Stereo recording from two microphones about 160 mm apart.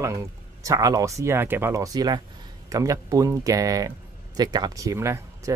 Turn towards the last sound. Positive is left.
turn(degrees=-20)  # may be behind; listen again after turning